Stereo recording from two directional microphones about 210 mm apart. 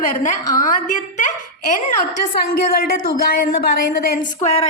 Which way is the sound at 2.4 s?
45° left (ahead or behind).